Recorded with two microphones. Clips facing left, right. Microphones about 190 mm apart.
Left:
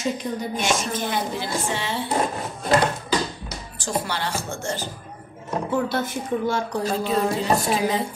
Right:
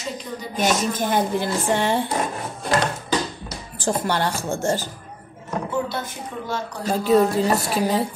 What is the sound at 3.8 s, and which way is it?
Speech, 50° right (ahead or behind).